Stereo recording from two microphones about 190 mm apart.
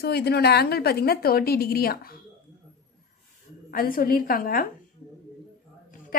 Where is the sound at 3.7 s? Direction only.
50° left (ahead or behind).